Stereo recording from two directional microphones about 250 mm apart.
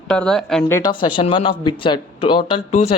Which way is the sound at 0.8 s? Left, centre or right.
Centre.